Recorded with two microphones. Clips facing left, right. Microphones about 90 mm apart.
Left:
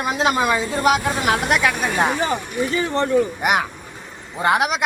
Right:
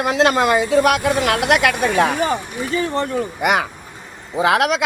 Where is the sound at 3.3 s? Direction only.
90° right.